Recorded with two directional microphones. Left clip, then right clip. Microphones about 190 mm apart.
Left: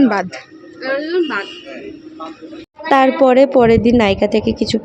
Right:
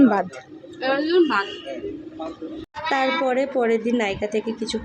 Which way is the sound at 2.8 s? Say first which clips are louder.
Left 10 dB; 40° left (ahead or behind).